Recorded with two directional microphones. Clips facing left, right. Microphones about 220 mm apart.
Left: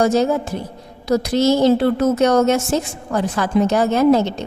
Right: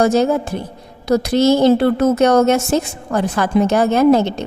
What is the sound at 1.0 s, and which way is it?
A woman's voice, 55° right (ahead or behind).